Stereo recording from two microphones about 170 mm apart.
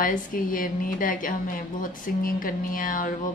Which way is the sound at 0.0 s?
55° left (ahead or behind).